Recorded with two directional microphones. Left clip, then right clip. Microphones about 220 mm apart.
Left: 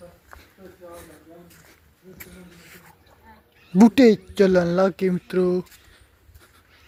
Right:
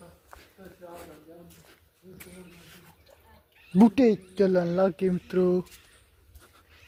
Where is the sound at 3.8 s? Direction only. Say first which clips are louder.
Left 6 dB; 15° left (ahead or behind).